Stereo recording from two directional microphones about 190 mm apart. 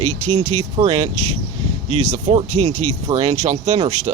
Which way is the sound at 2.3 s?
35° right (ahead or behind).